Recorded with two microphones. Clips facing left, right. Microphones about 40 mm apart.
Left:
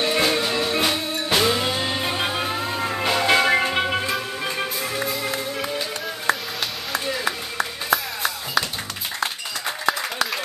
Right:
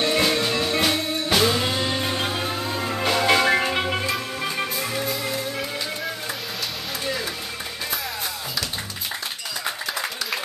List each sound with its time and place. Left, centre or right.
0.0 s music: centre
6.9 s a sound: centre
7.9 s music: left